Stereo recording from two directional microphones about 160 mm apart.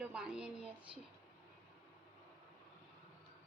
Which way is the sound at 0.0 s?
5° right (ahead or behind).